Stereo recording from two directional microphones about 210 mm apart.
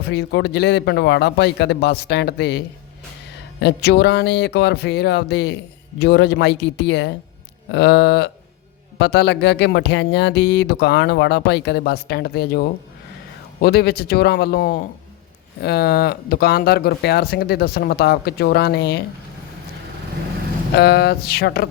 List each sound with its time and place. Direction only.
0.0 s speech: 55° left (ahead or behind)
20.7 s speech: 50° left (ahead or behind)